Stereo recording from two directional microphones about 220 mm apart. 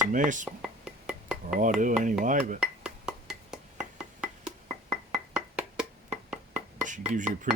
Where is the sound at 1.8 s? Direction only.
35° right (ahead or behind).